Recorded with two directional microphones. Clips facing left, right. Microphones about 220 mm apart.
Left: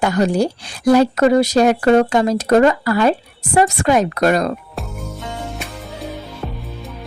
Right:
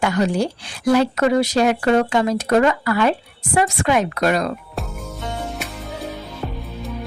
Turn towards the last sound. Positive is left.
turn(degrees=0)  # may be behind; listen again after turning